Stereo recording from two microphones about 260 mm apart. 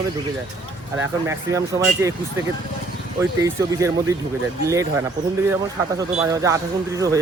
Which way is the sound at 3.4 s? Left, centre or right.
Centre.